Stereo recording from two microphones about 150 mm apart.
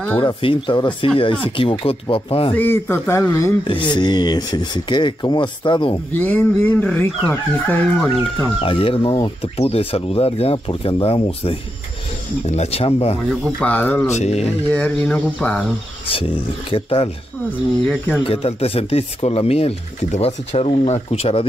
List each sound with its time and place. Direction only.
0.2 s speech: 35° left (ahead or behind)
2.5 s speech: 15° left (ahead or behind)
3.9 s speech: 30° left (ahead or behind)
6.1 s speech: 10° left (ahead or behind)
8.6 s speech: 35° left (ahead or behind)
13.3 s speech: 5° left (ahead or behind)
14.1 s speech: 45° left (ahead or behind)
14.7 s speech: 10° left (ahead or behind)
16.1 s speech: 35° left (ahead or behind)
17.5 s speech: 10° left (ahead or behind)
18.2 s speech: 40° left (ahead or behind)